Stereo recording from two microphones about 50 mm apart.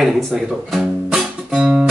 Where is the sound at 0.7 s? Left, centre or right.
Centre.